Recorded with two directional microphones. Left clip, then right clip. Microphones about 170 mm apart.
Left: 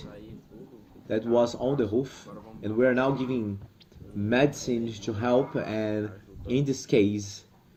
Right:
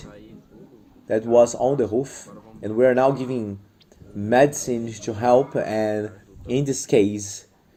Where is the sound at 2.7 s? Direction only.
25° right (ahead or behind).